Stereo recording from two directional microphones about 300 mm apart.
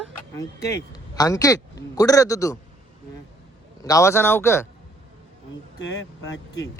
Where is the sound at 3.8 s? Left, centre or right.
Centre.